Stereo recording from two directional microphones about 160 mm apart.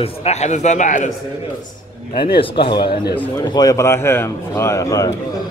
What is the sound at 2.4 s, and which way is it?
Speech, 35° left (ahead or behind).